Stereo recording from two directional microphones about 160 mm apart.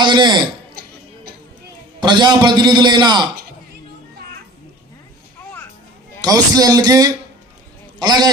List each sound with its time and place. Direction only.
0.0 s a man's voice: 30° right (ahead or behind)
2.0 s a man's voice: 30° right (ahead or behind)
6.2 s a man's voice: 25° right (ahead or behind)